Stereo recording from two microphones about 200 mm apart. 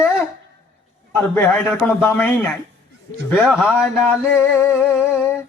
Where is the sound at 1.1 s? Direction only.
10° left (ahead or behind).